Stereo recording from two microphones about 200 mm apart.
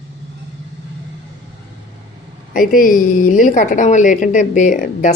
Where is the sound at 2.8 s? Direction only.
45° left (ahead or behind).